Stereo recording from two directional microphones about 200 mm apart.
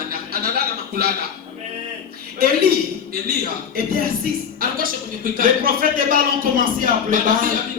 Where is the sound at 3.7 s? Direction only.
50° right (ahead or behind).